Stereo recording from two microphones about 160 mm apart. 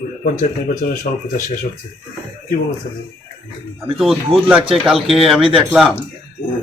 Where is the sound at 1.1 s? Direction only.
60° left (ahead or behind).